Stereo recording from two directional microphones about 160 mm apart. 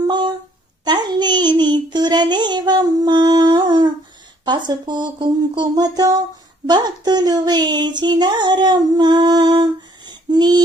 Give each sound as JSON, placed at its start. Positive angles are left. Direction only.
{"t": 0.0, "sound": "a sound", "side_deg": -25}
{"t": 0.9, "sound": "child singing", "side_deg": -25}
{"t": 4.4, "sound": "speech", "side_deg": -25}